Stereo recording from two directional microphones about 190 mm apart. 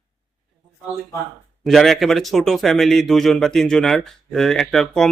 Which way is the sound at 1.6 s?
Centre (ahead or behind).